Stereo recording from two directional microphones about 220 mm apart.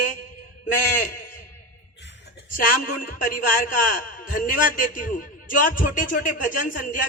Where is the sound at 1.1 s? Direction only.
40° left (ahead or behind).